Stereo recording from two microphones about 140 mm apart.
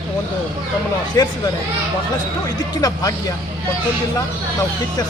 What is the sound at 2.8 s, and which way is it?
Speech, 25° left (ahead or behind).